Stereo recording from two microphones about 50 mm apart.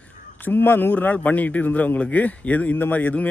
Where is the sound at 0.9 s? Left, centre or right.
Left.